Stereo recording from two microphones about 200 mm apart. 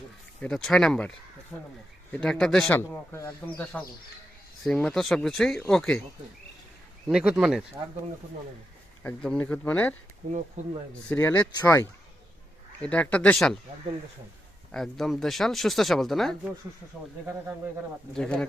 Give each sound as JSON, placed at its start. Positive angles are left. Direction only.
{"t": 0.3, "sound": "a man's voice", "side_deg": 5}
{"t": 7.1, "sound": "speech", "side_deg": -5}
{"t": 9.0, "sound": "a man's voice", "side_deg": 5}
{"t": 10.2, "sound": "speech", "side_deg": -45}
{"t": 11.1, "sound": "a man's voice", "side_deg": 10}
{"t": 14.7, "sound": "speech", "side_deg": 0}
{"t": 18.1, "sound": "speech", "side_deg": 5}